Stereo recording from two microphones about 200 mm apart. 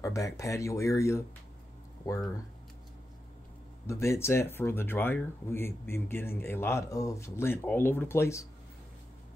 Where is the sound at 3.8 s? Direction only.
15° left (ahead or behind).